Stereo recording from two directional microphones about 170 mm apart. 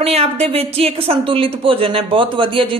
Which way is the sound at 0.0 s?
35° right (ahead or behind).